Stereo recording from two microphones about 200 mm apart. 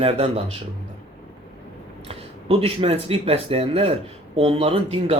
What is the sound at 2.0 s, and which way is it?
Speech, 30° right (ahead or behind).